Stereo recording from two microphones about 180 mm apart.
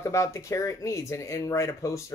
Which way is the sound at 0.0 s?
15° left (ahead or behind).